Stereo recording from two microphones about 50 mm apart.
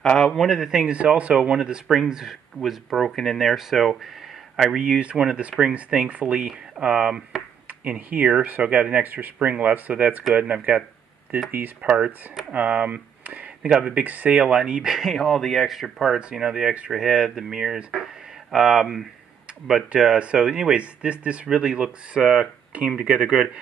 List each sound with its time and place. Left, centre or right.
0.0 s speech: centre
0.7 s speech: centre
3.2 s speech: centre
4.8 s speech: centre
13.6 s speech: centre; by 14.4 s right
14.4 s speech: centre
16.2 s speech: centre